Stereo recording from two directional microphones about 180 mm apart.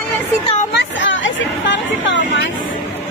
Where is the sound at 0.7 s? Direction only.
90° left.